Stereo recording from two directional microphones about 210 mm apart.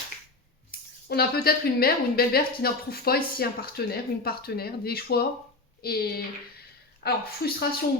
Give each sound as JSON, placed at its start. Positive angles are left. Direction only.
{"t": 1.0, "sound": "a woman's voice", "side_deg": 50}